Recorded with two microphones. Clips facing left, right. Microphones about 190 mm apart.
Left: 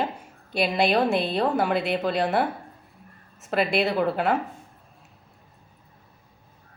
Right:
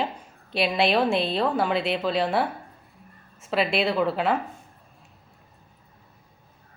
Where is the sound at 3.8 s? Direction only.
5° left (ahead or behind).